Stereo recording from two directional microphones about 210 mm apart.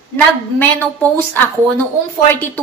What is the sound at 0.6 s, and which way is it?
A woman's voice, 10° left (ahead or behind).